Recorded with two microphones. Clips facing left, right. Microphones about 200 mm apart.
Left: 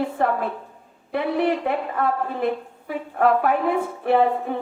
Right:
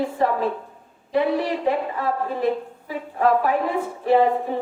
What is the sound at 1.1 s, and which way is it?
A woman's voice, 60° left (ahead or behind).